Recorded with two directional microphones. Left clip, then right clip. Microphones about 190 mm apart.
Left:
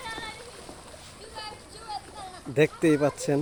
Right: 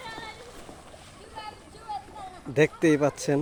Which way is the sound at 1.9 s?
Centre (ahead or behind).